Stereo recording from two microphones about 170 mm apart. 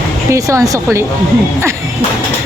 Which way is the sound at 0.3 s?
20° right (ahead or behind).